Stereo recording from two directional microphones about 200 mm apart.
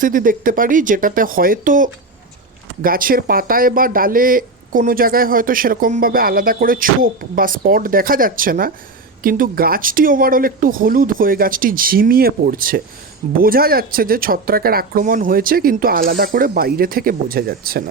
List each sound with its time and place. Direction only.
0.0 s speech: 45° right (ahead or behind)